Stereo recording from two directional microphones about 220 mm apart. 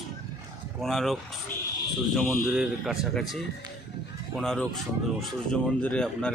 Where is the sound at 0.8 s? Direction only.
Centre (ahead or behind).